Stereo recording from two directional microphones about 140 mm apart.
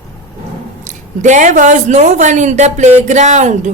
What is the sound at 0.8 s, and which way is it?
A woman's voice, 60° right (ahead or behind).